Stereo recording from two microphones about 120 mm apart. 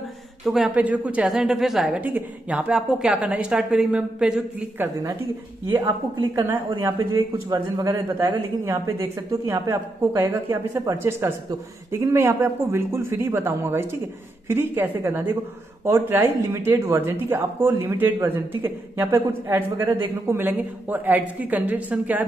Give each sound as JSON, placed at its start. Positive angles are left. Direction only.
{"t": 0.5, "sound": "a woman's voice", "side_deg": -5}
{"t": 5.8, "sound": "speech", "side_deg": -30}